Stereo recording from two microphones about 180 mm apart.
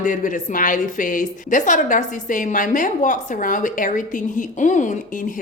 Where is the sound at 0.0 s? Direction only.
45° left (ahead or behind).